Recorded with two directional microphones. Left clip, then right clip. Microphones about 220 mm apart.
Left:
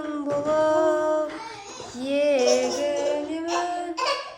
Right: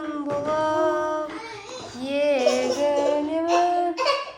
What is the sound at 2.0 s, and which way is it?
Female singing, 15° left (ahead or behind).